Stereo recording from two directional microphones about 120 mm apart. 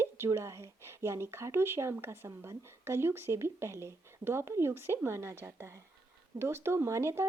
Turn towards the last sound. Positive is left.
turn(degrees=-25)  # may be behind; listen again after turning